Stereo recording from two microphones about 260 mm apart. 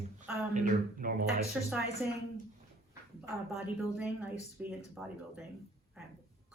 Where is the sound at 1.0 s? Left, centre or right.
Right.